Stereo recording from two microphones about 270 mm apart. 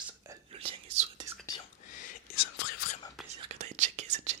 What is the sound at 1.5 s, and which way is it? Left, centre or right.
Whispering, centre.